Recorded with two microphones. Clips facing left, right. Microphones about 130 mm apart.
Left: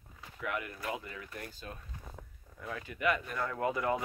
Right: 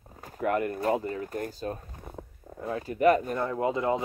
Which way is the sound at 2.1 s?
30° right (ahead or behind).